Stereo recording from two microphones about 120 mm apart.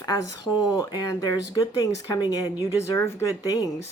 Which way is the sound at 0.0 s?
30° left (ahead or behind).